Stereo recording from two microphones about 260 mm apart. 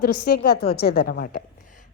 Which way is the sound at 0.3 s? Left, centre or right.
Left.